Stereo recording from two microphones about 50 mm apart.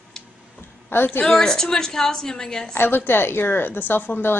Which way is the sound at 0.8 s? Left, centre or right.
Left.